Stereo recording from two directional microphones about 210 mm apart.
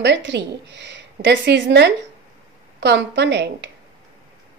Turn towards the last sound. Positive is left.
turn(degrees=-55)  # may be behind; listen again after turning